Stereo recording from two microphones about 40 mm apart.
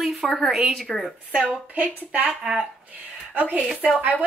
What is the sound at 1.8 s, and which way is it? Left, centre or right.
Speech, right.